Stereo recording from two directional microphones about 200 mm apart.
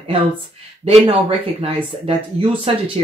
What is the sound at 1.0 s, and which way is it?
Speech, 30° right (ahead or behind).